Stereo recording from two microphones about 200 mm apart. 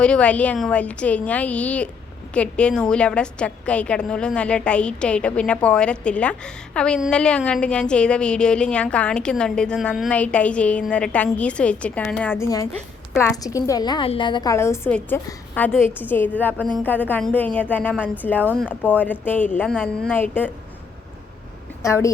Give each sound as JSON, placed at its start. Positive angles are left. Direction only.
{"t": 0.0, "sound": "a woman's voice", "side_deg": 5}
{"t": 21.8, "sound": "a woman's voice", "side_deg": 15}